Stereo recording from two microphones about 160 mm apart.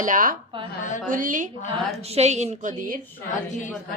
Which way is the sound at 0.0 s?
55° right (ahead or behind).